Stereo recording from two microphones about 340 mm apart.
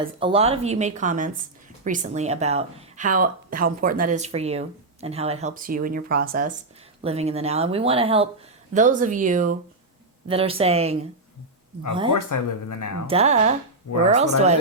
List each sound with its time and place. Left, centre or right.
0.0 s speech: centre
12.1 s speech: left
13.1 s speech: centre